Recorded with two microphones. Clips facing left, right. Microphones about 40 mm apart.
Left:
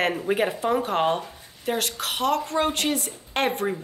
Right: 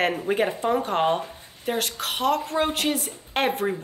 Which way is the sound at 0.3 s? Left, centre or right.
Centre.